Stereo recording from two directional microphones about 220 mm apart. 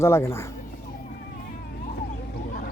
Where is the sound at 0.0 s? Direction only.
10° left (ahead or behind).